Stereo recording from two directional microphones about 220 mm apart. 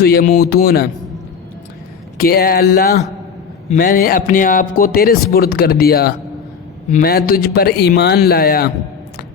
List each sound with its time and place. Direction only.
0.0 s a man's voice: 45° left (ahead or behind)
2.1 s a man's voice: 45° left (ahead or behind)